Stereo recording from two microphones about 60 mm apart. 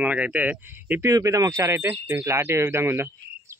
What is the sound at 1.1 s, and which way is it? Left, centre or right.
Speech, right.